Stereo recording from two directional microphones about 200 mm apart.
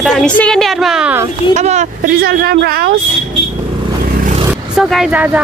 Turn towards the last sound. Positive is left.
turn(degrees=-5)  # may be behind; listen again after turning